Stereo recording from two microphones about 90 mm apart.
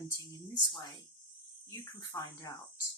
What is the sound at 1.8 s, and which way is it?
Speech, 30° left (ahead or behind).